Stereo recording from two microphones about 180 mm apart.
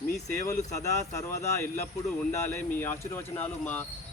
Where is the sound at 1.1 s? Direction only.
15° left (ahead or behind).